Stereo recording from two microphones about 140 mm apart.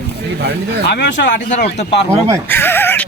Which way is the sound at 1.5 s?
55° left (ahead or behind).